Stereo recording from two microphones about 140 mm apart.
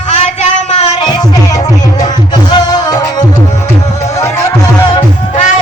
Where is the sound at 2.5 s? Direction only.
30° left (ahead or behind).